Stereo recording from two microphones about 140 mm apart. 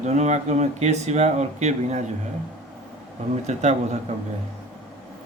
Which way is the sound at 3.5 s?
55° right (ahead or behind).